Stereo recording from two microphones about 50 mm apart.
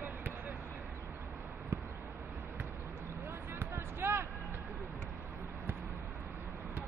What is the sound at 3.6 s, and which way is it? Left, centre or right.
Basketball bounce, right.